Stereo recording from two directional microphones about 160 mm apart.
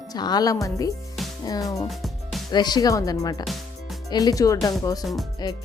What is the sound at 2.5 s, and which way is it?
Speech, 25° left (ahead or behind).